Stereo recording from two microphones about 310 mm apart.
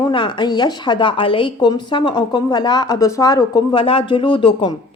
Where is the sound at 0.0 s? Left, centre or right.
Centre.